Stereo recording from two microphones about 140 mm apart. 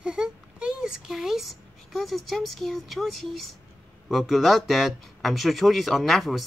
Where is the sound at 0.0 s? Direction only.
5° right (ahead or behind).